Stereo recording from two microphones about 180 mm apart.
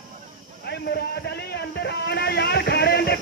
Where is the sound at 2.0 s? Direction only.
65° left (ahead or behind).